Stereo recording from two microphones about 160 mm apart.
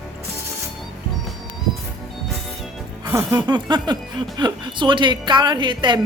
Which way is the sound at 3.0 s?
15° right (ahead or behind).